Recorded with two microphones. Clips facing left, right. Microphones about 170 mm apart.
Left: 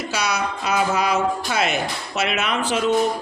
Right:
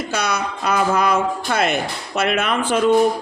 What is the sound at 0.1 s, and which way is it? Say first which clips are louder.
Speech: even; 55° right (ahead or behind).